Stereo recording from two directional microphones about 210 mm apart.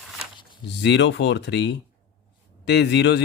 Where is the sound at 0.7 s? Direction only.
55° left (ahead or behind).